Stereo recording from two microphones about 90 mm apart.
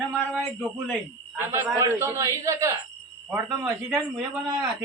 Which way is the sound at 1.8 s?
35° right (ahead or behind).